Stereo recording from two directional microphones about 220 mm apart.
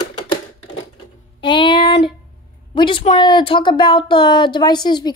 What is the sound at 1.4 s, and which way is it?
Child singing, 20° left (ahead or behind).